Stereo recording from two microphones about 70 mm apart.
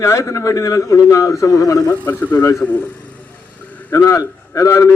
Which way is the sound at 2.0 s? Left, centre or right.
Left.